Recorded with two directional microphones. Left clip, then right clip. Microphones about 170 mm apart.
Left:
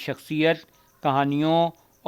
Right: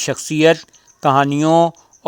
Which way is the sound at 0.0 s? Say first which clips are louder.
Right 9 dB; 40° right (ahead or behind).